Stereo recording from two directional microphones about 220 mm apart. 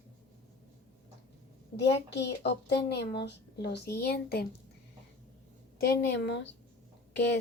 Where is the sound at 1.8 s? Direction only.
50° left (ahead or behind).